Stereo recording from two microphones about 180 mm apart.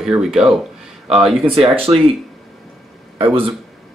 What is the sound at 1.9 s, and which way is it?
Speech, 25° right (ahead or behind).